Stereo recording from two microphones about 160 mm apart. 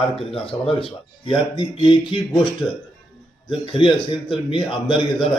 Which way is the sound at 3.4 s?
35° left (ahead or behind).